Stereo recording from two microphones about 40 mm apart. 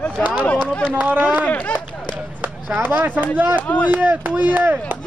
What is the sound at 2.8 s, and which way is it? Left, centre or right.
Speech, right.